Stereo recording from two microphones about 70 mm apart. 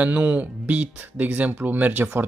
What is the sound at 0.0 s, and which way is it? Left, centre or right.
Speech, right.